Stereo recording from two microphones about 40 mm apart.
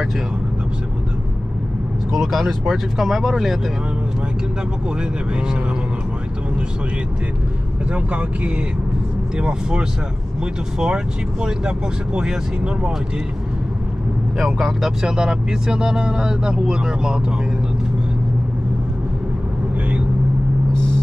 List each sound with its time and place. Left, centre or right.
2.1 s speech: centre
7.9 s speech: right
9.4 s speech: right
11.4 s speech: centre
14.4 s speech: centre
15.0 s speech: centre